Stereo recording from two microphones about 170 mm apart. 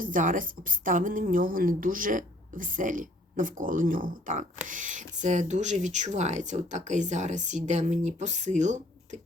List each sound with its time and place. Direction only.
0.0 s a woman's voice: 50° right (ahead or behind)